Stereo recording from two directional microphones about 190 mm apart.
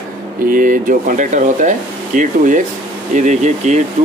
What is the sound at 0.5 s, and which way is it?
Speech, 45° right (ahead or behind).